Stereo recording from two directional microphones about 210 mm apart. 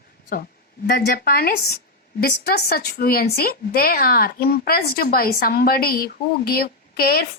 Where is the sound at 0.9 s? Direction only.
45° left (ahead or behind).